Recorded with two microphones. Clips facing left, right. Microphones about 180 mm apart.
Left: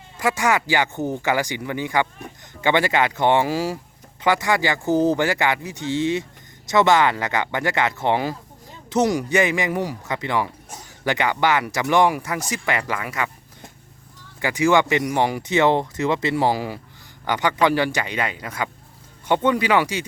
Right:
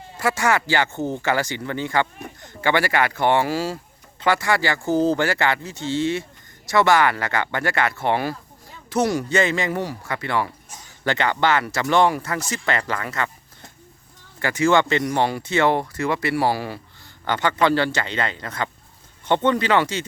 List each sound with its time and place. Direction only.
0.2 s speech: 15° left (ahead or behind)